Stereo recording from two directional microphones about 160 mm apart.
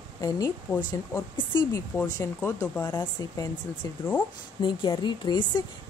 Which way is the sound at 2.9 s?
25° left (ahead or behind).